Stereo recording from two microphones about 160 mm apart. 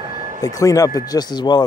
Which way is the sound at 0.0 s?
35° right (ahead or behind).